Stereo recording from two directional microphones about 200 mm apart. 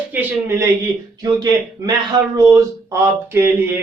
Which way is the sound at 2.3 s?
15° right (ahead or behind).